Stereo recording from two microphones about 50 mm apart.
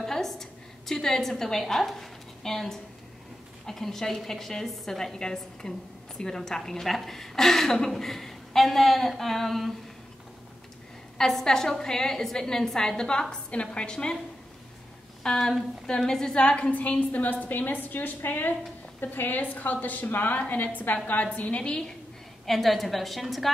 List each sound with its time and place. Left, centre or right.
0.0 s a sound: centre
3.6 s a woman's voice: centre
11.1 s a woman's voice: centre
15.2 s a woman's voice: centre
22.5 s a woman's voice: centre